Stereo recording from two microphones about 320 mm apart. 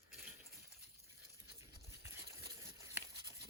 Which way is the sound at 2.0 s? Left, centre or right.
Centre.